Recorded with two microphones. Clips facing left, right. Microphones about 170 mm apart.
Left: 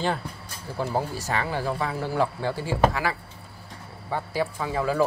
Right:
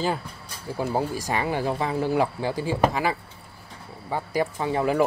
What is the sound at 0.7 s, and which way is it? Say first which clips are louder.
Speech: right 2 dB; 15° right (ahead or behind).